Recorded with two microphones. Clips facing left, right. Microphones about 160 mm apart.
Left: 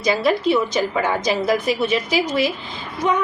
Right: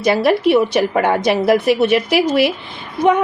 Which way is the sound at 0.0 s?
65° right (ahead or behind).